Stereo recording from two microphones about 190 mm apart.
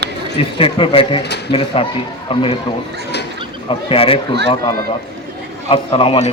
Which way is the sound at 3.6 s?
30° left (ahead or behind).